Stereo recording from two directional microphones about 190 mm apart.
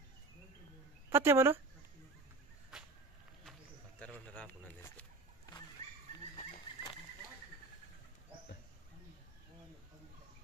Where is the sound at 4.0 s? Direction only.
5° left (ahead or behind).